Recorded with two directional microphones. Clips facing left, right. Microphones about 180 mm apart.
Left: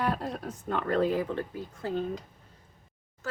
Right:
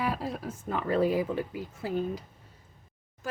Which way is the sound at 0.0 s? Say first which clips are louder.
Left 1 dB; 5° right (ahead or behind).